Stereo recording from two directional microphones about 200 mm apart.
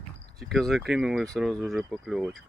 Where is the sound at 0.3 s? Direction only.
Centre (ahead or behind).